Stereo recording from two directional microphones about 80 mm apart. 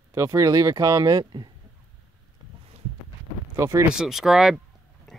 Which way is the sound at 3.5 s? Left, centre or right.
Right.